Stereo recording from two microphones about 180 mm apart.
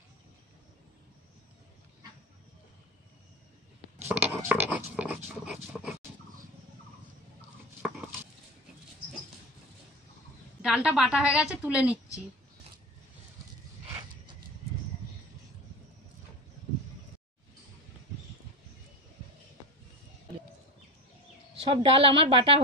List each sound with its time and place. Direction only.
4.1 s a sound: 10° right (ahead or behind)
10.6 s a woman's voice: 5° right (ahead or behind)
21.5 s a woman's voice: 30° right (ahead or behind)